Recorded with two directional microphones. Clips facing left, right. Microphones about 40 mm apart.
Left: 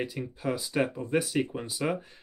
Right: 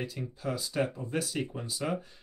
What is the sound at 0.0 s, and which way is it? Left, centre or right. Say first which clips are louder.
Speech: left 4 dB; left.